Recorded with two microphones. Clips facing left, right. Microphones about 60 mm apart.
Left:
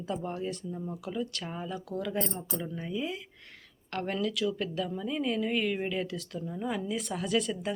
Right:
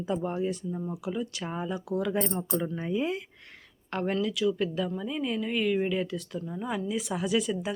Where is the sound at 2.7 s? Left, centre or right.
Right.